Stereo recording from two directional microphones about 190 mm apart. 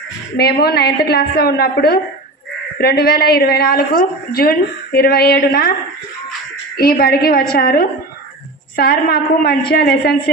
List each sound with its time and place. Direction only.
0.3 s a woman's voice: 55° left (ahead or behind)
6.7 s a woman's voice: 50° left (ahead or behind)